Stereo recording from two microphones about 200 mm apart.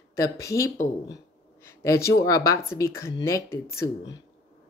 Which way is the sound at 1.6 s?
15° left (ahead or behind).